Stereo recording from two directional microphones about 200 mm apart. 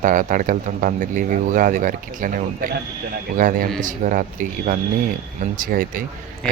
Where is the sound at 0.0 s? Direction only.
40° right (ahead or behind).